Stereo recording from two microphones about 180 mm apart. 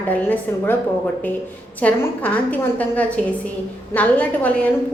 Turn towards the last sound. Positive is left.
turn(degrees=10)  # may be behind; listen again after turning